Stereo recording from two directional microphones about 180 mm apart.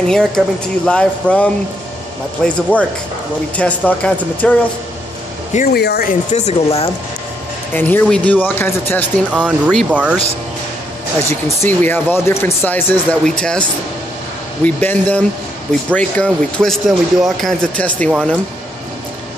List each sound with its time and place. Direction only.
0.0 s speech: 5° left (ahead or behind)
5.7 s speech: 65° left (ahead or behind)
6.3 s speech: 35° left (ahead or behind)
7.7 s speech: 10° left (ahead or behind)
9.3 s speech: 5° right (ahead or behind)
11.2 s speech: 15° left (ahead or behind)